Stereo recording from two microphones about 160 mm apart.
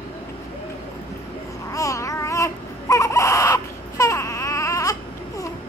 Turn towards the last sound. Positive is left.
turn(degrees=20)  # may be behind; listen again after turning